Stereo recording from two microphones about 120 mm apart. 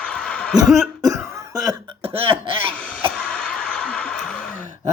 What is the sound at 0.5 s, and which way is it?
Cough, centre (ahead or behind).